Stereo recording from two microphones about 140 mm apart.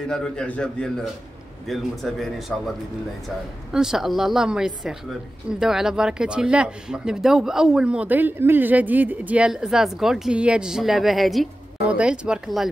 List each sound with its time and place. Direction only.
0.1 s speech: 5° left (ahead or behind)
3.7 s speech: 5° right (ahead or behind)